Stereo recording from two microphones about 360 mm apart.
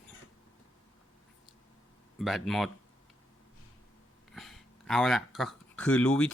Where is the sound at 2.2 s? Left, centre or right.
Centre.